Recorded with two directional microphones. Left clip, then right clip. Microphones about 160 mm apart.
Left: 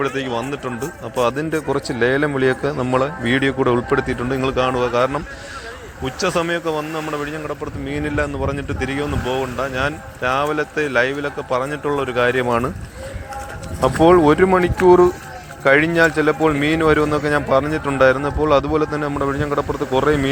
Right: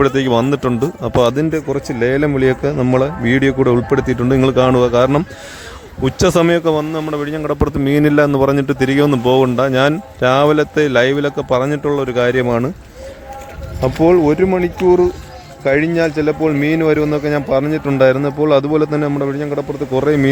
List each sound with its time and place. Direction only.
0.0 s a man's voice: 90° right; by 1.6 s 60° right (ahead or behind)
1.7 s speech: 30° right (ahead or behind)
2.0 s a man's voice: 45° right (ahead or behind); by 5.2 s 70° right (ahead or behind)
6.1 s speech: 90° right; by 12.7 s 55° right (ahead or behind)
14.3 s speech: 35° right (ahead or behind)
15.6 s a man's voice: 45° right (ahead or behind)
19.2 s speech: 40° right (ahead or behind)